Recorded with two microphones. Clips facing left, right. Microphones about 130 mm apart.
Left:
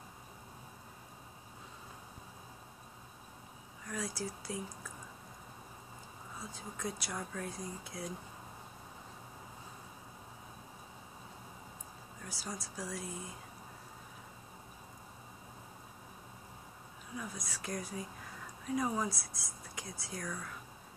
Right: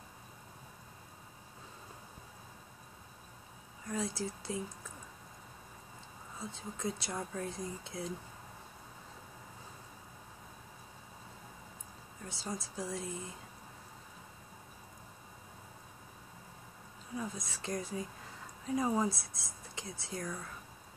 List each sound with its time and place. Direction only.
3.9 s speech: 25° right (ahead or behind)
6.4 s speech: 25° right (ahead or behind)
12.3 s speech: 25° right (ahead or behind)
17.2 s speech: 25° right (ahead or behind)